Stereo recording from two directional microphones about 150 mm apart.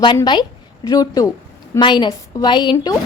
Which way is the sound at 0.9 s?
25° left (ahead or behind).